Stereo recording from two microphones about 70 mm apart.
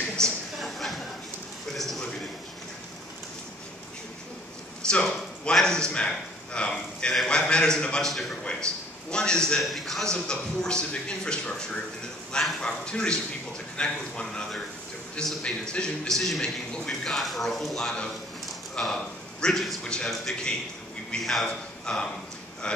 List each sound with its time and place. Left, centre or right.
0.5 s a sound: centre
4.8 s a man's voice: centre
8.1 s a man's voice: centre
8.5 s a man's voice: centre
9.6 s a man's voice: centre
15.4 s a man's voice: centre
16.1 s a man's voice: centre
19.4 s a man's voice: centre
19.8 s a man's voice: centre